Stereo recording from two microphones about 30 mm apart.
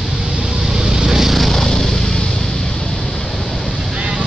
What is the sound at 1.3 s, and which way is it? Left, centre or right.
Vehicle, centre.